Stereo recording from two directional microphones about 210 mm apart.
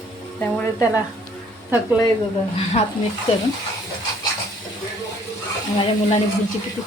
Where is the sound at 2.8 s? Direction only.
30° left (ahead or behind).